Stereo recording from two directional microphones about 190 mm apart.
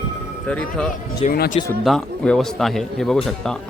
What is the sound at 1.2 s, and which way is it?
Speech, 50° left (ahead or behind).